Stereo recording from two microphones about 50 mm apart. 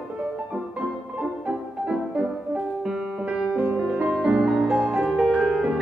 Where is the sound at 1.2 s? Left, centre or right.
Centre.